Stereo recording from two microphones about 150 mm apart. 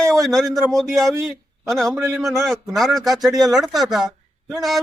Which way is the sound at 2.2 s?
20° right (ahead or behind).